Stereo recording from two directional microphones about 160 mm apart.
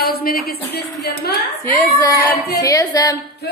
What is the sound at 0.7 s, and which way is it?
Speech, 90° left.